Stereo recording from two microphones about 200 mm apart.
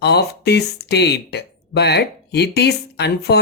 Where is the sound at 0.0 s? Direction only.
55° left (ahead or behind).